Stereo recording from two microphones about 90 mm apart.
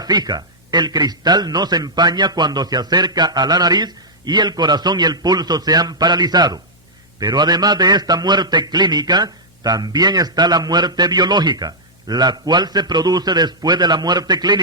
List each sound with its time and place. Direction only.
0.0 s a man's voice: 45° right (ahead or behind)